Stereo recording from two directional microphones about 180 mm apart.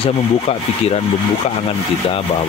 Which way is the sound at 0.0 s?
35° left (ahead or behind).